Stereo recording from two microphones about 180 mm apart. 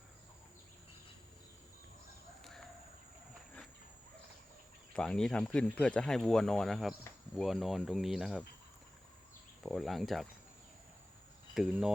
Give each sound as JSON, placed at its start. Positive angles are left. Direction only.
{"t": 2.4, "sound": "chicken", "side_deg": 0}
{"t": 4.9, "sound": "speech", "side_deg": 5}
{"t": 9.6, "sound": "speech", "side_deg": 0}
{"t": 11.5, "sound": "speech", "side_deg": -5}